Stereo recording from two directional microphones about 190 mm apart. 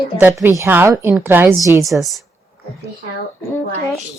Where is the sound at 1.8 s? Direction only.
Centre (ahead or behind).